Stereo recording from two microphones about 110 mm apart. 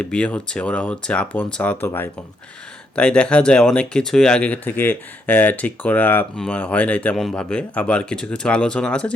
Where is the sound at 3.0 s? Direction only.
10° left (ahead or behind).